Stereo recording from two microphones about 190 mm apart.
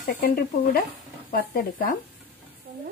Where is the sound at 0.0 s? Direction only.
50° left (ahead or behind).